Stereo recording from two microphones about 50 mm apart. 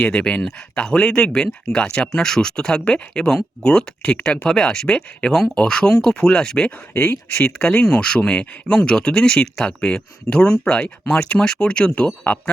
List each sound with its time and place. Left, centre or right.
0.0 s speech: left
6.9 s speech: left
7.3 s speech: centre